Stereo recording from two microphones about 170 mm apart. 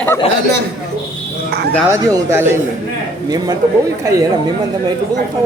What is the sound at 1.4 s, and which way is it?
Speech, 70° right (ahead or behind).